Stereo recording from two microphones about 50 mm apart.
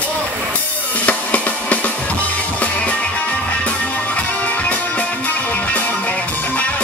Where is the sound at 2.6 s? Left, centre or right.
Left.